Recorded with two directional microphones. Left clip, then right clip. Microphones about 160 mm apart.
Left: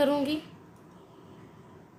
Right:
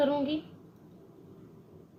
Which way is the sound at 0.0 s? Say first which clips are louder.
Left 2 dB; 45° left (ahead or behind).